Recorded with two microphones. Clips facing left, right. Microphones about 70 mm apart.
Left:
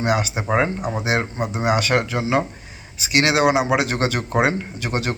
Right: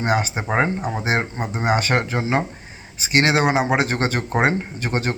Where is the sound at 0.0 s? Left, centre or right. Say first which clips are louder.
Even; right.